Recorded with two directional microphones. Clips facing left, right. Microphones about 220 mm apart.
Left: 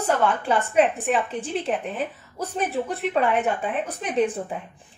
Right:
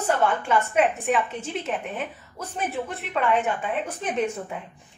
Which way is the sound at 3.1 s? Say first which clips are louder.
Even; 35° left (ahead or behind).